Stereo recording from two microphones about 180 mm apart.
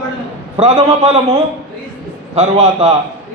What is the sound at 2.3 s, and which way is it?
Speech, 35° right (ahead or behind).